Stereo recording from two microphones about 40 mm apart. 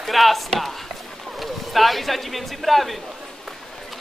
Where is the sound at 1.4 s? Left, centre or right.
Centre.